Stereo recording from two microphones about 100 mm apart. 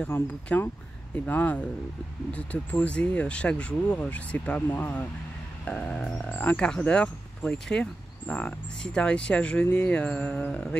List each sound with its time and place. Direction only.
0.0 s speech: 20° left (ahead or behind)